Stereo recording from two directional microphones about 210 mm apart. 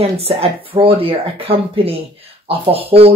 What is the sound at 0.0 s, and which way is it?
Speech, 30° right (ahead or behind).